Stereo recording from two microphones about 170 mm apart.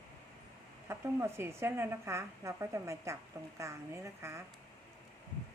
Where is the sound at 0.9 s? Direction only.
15° right (ahead or behind).